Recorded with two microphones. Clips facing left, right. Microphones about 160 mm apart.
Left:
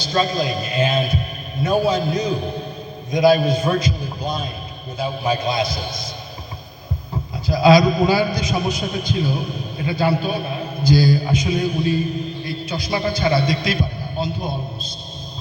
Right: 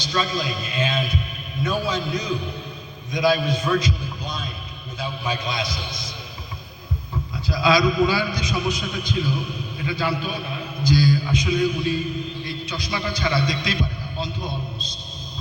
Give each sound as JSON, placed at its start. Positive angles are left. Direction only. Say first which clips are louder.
{"t": 0.0, "sound": "a man's voice", "louder": "left 5 dB", "side_deg": 35}
{"t": 7.4, "sound": "a man's voice", "louder": "left 6 dB", "side_deg": 35}